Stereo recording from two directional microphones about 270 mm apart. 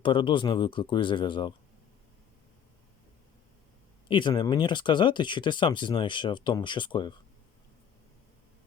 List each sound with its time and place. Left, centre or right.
0.0 s speech: centre
4.1 s speech: centre